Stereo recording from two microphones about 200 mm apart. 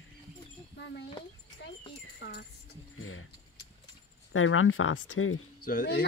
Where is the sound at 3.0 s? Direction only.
90° left.